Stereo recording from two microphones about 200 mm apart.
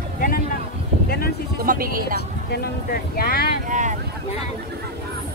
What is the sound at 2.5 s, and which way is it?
Speech, 50° left (ahead or behind).